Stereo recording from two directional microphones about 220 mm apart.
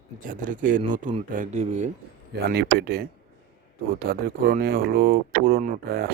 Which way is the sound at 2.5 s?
45° right (ahead or behind).